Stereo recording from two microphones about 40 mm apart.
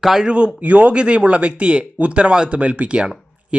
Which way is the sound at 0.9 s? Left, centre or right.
Right.